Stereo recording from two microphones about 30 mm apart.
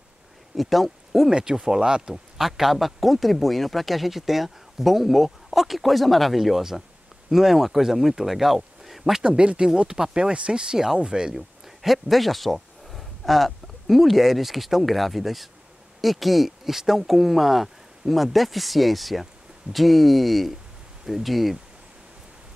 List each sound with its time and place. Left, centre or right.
0.6 s speech: centre
1.3 s speech: right
2.3 s a man's voice: centre
9.4 s speech: right
9.9 s speech: centre
10.3 s speech: right
11.3 s a man's voice: centre